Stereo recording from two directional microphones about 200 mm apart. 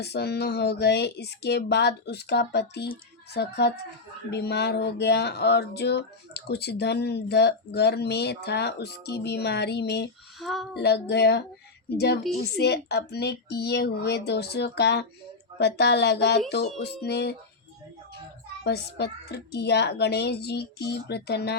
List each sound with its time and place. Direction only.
0.0 s speech: 55° left (ahead or behind)
10.4 s speech: centre (ahead or behind)
10.8 s speech: 55° left (ahead or behind)
18.6 s speech: 55° left (ahead or behind)